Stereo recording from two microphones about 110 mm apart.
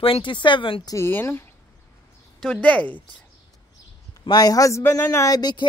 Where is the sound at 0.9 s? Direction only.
20° left (ahead or behind).